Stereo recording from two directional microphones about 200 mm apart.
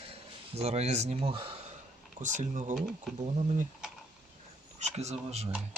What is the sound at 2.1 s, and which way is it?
Speech, 40° right (ahead or behind).